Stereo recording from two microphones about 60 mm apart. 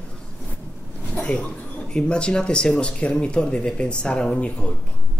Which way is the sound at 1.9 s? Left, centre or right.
Centre.